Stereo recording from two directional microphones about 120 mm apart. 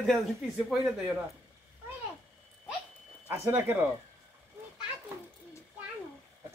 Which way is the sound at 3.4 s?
15° right (ahead or behind).